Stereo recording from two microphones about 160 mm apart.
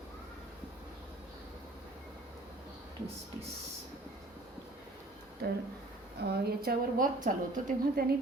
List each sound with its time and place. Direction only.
5.4 s a woman's voice: 85° right; by 8.0 s 55° right (ahead or behind)